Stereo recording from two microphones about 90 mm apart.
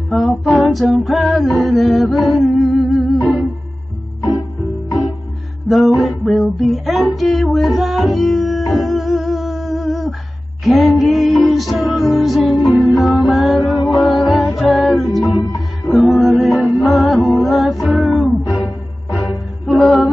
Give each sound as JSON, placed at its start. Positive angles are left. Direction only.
{"t": 0.1, "sound": "female singing", "side_deg": 0}
{"t": 1.6, "sound": "music", "side_deg": 0}
{"t": 5.9, "sound": "music", "side_deg": 0}
{"t": 15.4, "sound": "music", "side_deg": 45}
{"t": 15.9, "sound": "music", "side_deg": 0}
{"t": 19.6, "sound": "music", "side_deg": 0}